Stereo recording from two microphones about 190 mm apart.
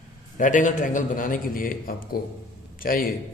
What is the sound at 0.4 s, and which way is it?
A man's voice, 40° left (ahead or behind).